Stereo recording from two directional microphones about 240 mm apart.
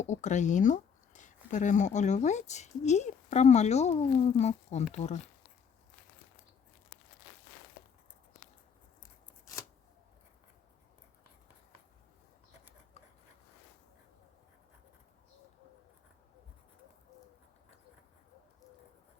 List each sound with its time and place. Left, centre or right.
0.0 s speech: left